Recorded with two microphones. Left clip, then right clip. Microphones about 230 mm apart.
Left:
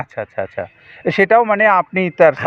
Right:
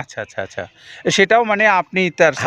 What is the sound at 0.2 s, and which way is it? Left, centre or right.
Speech, centre.